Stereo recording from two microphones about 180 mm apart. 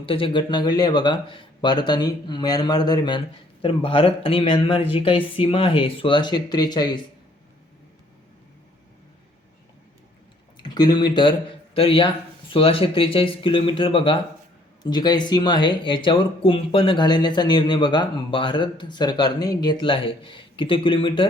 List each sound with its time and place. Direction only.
0.0 s speech: 30° left (ahead or behind)
10.6 s speech: 25° left (ahead or behind)